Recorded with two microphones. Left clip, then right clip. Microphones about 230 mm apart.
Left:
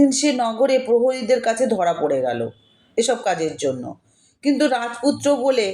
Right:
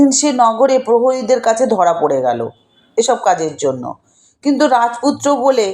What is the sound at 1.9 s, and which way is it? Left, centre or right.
Speech, right.